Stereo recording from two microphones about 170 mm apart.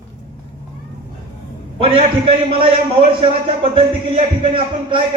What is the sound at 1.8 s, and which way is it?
A man's voice, 30° right (ahead or behind).